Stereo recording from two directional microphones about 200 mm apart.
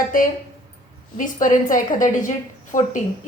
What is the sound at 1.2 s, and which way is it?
A woman's voice, 40° left (ahead or behind).